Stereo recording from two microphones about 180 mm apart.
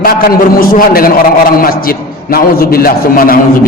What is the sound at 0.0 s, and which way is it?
A man's voice, 55° left (ahead or behind).